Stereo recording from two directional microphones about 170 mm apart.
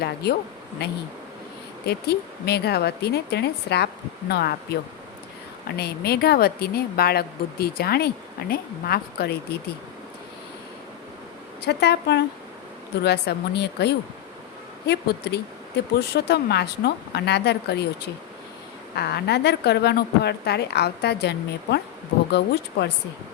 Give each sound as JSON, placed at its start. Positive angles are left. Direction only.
{"t": 0.0, "sound": "speech", "side_deg": 70}
{"t": 11.6, "sound": "speech", "side_deg": 80}